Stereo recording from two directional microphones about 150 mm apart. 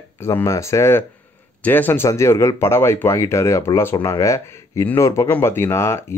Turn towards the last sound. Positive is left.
turn(degrees=15)  # may be behind; listen again after turning